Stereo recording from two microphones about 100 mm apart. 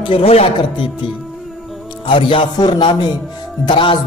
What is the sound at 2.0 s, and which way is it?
Speech, 55° left (ahead or behind).